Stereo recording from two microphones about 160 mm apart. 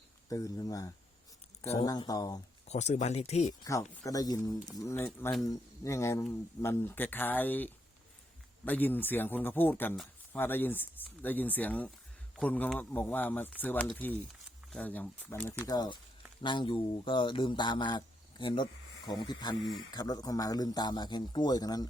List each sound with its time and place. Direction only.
0.3 s speech: 20° left (ahead or behind)
2.6 s speech: 45° left (ahead or behind)
3.6 s speech: 20° left (ahead or behind)
15.6 s speech: 25° left (ahead or behind)